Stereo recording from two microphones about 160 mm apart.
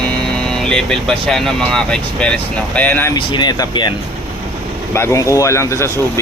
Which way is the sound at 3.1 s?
30° left (ahead or behind).